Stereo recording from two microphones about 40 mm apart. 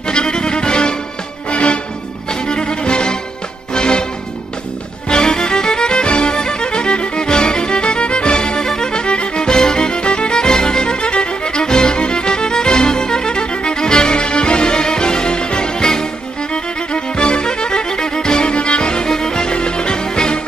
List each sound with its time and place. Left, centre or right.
0.1 s music: left
5.1 s music: centre